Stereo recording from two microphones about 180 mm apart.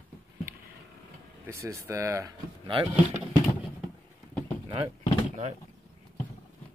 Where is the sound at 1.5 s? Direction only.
15° right (ahead or behind).